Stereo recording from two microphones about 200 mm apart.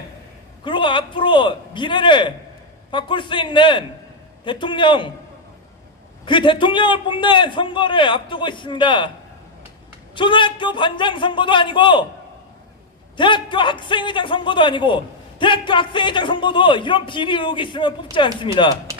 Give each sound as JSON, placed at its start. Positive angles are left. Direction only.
{"t": 0.6, "sound": "a man's voice", "side_deg": 25}
{"t": 6.2, "sound": "a man's voice", "side_deg": 25}
{"t": 10.2, "sound": "a man's voice", "side_deg": 25}
{"t": 13.1, "sound": "a man's voice", "side_deg": 25}